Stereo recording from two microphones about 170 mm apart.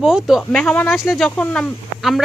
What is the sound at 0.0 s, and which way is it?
Speech, 5° right (ahead or behind).